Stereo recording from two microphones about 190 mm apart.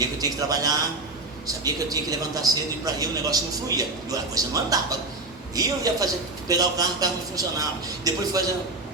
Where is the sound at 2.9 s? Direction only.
20° right (ahead or behind).